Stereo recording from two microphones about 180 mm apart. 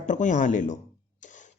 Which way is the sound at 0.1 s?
45° left (ahead or behind).